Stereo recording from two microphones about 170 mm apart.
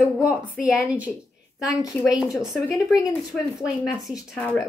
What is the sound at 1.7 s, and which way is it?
Speech, 20° left (ahead or behind).